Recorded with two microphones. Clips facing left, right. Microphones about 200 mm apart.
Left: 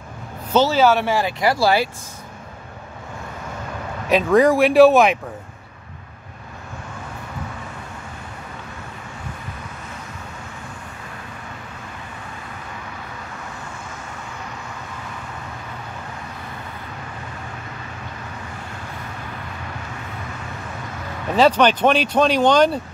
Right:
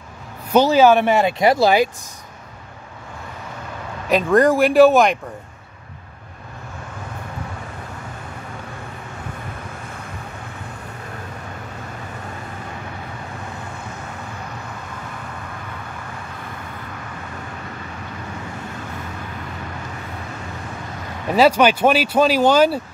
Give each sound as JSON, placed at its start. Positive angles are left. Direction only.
{"t": 0.5, "sound": "speech", "side_deg": -15}
{"t": 4.1, "sound": "speech", "side_deg": 0}
{"t": 21.4, "sound": "speech", "side_deg": -10}